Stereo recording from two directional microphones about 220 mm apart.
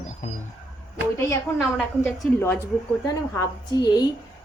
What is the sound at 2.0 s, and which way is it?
A woman's voice, 10° left (ahead or behind).